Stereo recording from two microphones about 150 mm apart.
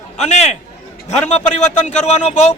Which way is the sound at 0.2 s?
50° left (ahead or behind).